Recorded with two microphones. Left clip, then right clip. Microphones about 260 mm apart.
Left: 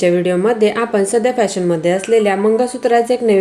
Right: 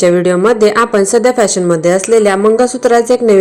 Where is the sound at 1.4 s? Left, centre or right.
Centre.